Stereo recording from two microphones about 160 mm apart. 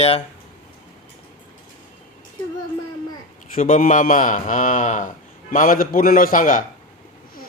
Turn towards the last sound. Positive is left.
turn(degrees=55)  # may be behind; listen again after turning